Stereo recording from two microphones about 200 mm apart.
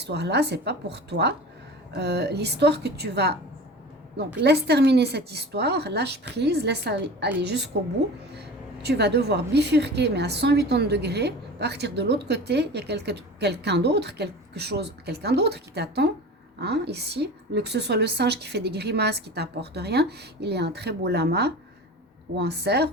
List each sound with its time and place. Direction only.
0.0 s speech: 55° right (ahead or behind)
4.4 s speech: 55° right (ahead or behind)